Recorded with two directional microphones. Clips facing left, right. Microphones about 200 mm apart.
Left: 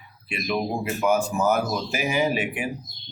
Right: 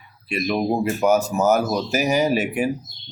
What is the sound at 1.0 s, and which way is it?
Speech, 40° right (ahead or behind).